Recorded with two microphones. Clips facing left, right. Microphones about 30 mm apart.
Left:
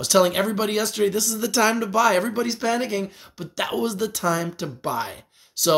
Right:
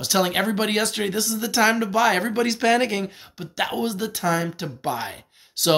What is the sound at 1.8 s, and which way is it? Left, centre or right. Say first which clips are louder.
Speech: left 1 dB; right.